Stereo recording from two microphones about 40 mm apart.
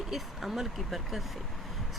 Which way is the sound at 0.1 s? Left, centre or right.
Centre.